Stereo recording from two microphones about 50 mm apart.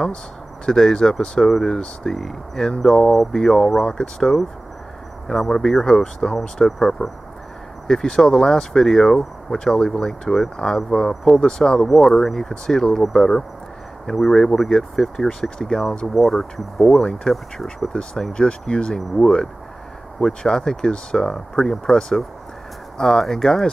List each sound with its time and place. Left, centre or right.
0.7 s speech: centre
16.2 s speech: centre
17.0 s speech: centre
18.3 s speech: centre